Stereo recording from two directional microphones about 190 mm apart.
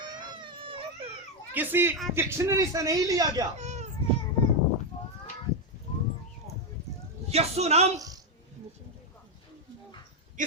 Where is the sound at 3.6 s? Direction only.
35° right (ahead or behind).